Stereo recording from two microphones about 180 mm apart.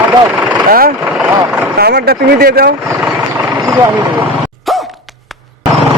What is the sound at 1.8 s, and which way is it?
Speech, 60° right (ahead or behind).